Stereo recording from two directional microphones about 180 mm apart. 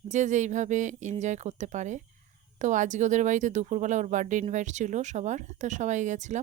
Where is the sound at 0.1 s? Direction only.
45° right (ahead or behind).